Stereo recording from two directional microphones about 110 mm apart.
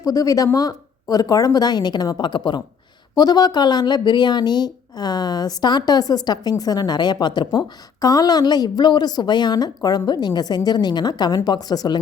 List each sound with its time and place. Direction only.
0.0 s a woman's voice: 30° left (ahead or behind)